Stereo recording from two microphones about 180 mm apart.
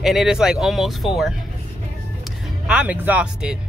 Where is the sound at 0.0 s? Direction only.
Centre (ahead or behind).